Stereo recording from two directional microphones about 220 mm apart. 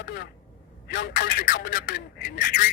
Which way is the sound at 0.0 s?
45° left (ahead or behind).